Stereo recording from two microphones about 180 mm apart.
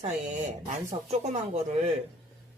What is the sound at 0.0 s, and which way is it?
Speech, 40° right (ahead or behind).